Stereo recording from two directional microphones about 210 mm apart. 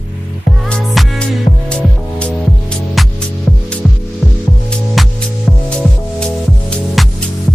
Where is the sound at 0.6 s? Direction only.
Centre (ahead or behind).